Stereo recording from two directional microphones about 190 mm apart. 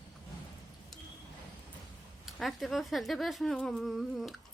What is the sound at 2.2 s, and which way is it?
Speech, centre (ahead or behind).